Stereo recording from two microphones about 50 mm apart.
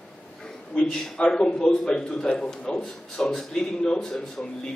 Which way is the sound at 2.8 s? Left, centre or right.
Centre.